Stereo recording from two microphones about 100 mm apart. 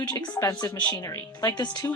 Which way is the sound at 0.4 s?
45° left (ahead or behind).